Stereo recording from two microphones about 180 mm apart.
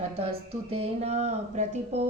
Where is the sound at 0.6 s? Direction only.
35° right (ahead or behind).